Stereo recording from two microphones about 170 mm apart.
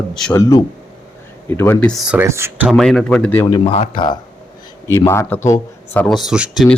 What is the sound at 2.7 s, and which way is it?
Speech, centre (ahead or behind).